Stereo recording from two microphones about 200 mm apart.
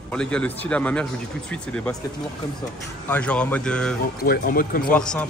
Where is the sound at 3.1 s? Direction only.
5° left (ahead or behind).